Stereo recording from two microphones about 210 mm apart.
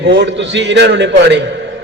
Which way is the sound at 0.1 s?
60° right (ahead or behind).